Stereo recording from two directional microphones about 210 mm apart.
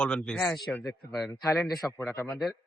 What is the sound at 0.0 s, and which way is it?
Speech, 5° left (ahead or behind).